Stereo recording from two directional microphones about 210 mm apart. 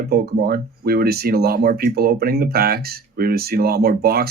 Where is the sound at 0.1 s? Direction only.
45° right (ahead or behind).